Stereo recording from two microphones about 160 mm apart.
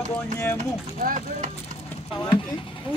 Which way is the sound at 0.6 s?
55° right (ahead or behind).